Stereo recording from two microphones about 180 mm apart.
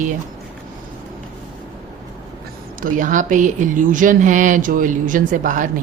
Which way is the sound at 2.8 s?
45° right (ahead or behind).